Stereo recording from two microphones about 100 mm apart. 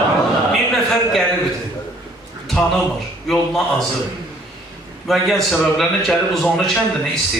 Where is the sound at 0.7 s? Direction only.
5° left (ahead or behind).